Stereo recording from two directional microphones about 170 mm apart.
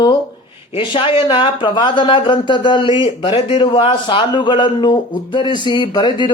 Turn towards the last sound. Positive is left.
turn(degrees=25)  # may be behind; listen again after turning